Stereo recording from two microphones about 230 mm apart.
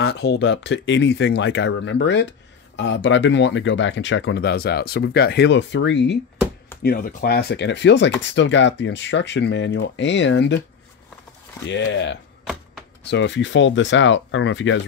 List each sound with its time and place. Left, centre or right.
0.0 s speech: left
11.6 s speech: left